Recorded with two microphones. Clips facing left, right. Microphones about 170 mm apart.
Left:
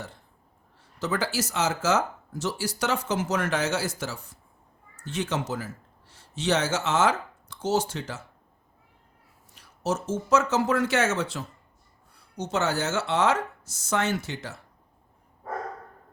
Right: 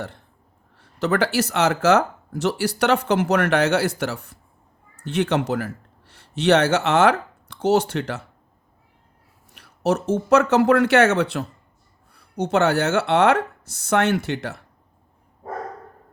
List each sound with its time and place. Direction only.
0.8 s a man's voice: 65° right (ahead or behind)
9.5 s speech: 65° right (ahead or behind)